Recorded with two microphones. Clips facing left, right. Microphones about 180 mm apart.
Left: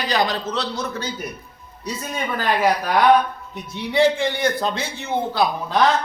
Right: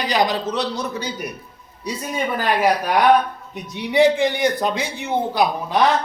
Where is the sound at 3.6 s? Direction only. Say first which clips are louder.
Right 2 dB; 15° right (ahead or behind).